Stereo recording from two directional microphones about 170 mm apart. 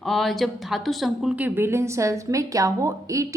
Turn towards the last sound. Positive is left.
turn(degrees=-20)  # may be behind; listen again after turning